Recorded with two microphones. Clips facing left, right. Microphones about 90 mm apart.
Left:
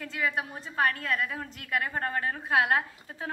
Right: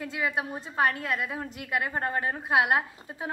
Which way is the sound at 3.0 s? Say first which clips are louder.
Right 2 dB; 20° right (ahead or behind).